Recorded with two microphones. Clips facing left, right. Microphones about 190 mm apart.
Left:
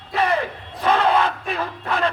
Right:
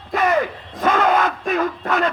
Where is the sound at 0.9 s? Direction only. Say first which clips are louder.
Right 1 dB; 35° left (ahead or behind).